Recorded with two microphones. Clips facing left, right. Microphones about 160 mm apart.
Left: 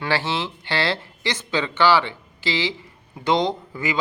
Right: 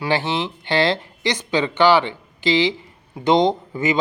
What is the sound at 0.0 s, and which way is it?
Speech, 20° right (ahead or behind).